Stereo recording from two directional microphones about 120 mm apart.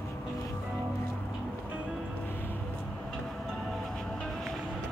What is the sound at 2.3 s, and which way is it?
Music, 20° left (ahead or behind).